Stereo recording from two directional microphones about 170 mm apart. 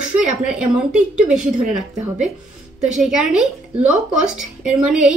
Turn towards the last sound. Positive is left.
turn(degrees=-5)  # may be behind; listen again after turning